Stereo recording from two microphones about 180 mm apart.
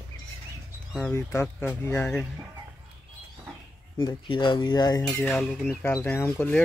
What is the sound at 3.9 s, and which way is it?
Speech, 25° left (ahead or behind).